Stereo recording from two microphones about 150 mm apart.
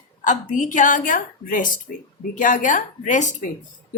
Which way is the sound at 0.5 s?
60° left (ahead or behind).